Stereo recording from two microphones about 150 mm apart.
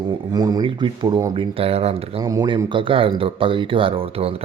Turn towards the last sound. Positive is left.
turn(degrees=-40)  # may be behind; listen again after turning